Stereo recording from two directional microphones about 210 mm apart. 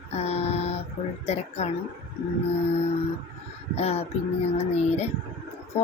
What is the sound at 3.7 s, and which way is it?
A woman's voice, 30° left (ahead or behind).